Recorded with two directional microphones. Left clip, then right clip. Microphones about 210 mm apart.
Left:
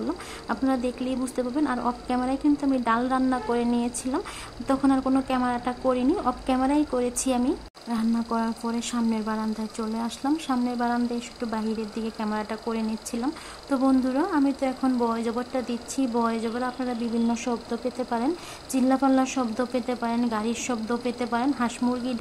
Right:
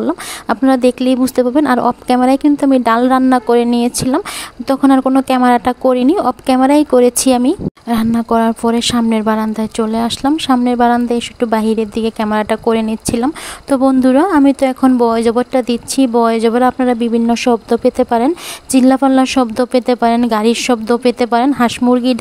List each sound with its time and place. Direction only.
0.0 s a woman's voice: 40° right (ahead or behind)